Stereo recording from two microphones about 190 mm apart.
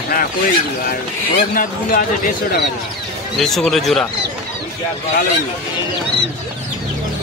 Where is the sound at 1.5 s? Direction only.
50° left (ahead or behind).